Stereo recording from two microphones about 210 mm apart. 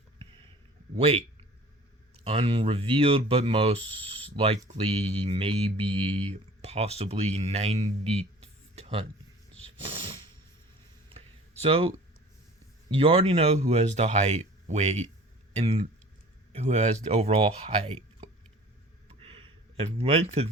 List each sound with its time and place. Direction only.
0.9 s speech: 30° right (ahead or behind)
8.7 s a sound: 30° right (ahead or behind)
9.8 s snort: 25° right (ahead or behind)
11.6 s speech: 25° right (ahead or behind)
12.9 s speech: 25° right (ahead or behind)
19.0 s a sound: 25° right (ahead or behind)